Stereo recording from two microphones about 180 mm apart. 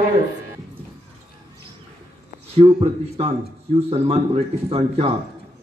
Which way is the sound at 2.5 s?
35° right (ahead or behind).